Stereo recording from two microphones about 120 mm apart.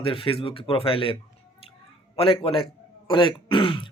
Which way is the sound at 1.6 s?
50° left (ahead or behind).